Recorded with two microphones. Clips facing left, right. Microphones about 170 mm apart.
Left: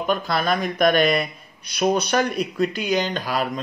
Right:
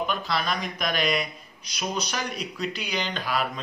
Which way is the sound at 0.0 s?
50° left (ahead or behind).